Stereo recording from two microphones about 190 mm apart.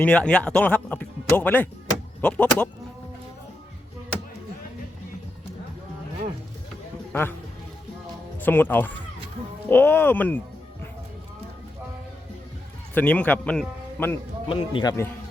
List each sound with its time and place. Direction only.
0.0 s speech: 5° left (ahead or behind)
7.1 s speech: 10° left (ahead or behind)
8.4 s speech: 10° left (ahead or behind)
12.9 s a man's voice: 10° left (ahead or behind)
14.5 s a man's voice: 25° left (ahead or behind)